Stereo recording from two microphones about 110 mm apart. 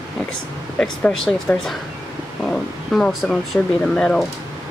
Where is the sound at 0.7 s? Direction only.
5° left (ahead or behind).